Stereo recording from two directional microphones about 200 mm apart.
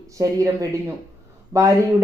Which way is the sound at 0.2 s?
15° right (ahead or behind).